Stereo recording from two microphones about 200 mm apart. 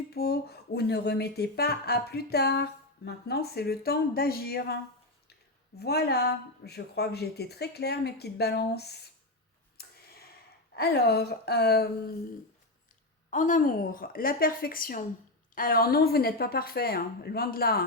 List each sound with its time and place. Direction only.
0.1 s speech: 50° left (ahead or behind)
5.8 s speech: 55° left (ahead or behind)
9.8 s a sound: 50° left (ahead or behind)
10.8 s speech: 50° left (ahead or behind)
13.3 s speech: 40° left (ahead or behind)